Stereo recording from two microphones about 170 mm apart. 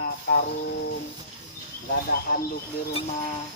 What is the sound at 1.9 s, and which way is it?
Speech, 65° left (ahead or behind).